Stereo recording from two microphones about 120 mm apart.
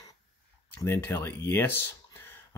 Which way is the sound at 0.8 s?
20° left (ahead or behind).